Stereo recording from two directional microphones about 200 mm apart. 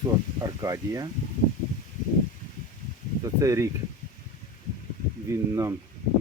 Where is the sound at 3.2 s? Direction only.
15° right (ahead or behind).